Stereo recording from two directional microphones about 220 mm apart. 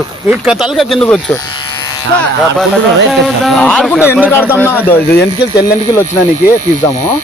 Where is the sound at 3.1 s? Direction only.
Centre (ahead or behind).